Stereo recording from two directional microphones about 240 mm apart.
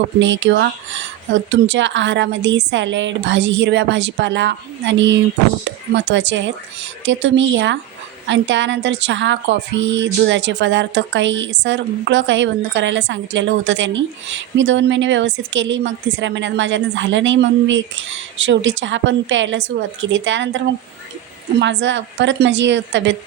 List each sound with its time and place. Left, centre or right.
0.2 s a woman's voice: right
21.6 s a woman's voice: right